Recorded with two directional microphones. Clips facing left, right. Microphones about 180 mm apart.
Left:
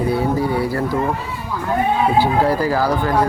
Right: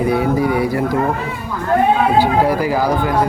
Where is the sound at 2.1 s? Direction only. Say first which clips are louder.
Right 2 dB; 15° right (ahead or behind).